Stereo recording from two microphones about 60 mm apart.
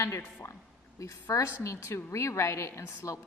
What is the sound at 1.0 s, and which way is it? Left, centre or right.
A woman's voice, left.